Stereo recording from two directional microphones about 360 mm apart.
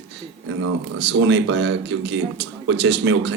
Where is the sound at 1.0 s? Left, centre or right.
Right.